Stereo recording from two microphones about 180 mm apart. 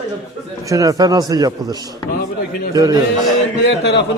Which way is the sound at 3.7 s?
70° left (ahead or behind).